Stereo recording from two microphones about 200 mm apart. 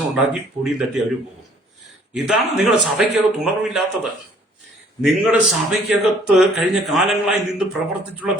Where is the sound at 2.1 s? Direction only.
Centre (ahead or behind).